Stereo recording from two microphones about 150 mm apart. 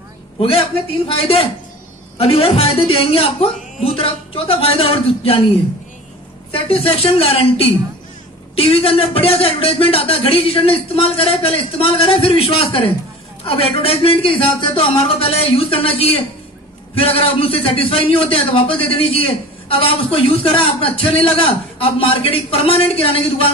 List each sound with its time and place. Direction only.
0.4 s a man's voice: 40° left (ahead or behind)
6.5 s a man's voice: 40° left (ahead or behind)